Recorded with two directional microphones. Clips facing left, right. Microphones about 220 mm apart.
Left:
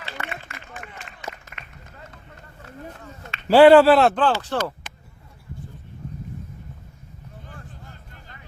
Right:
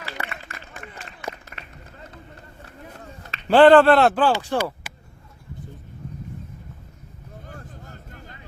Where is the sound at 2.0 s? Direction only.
35° right (ahead or behind).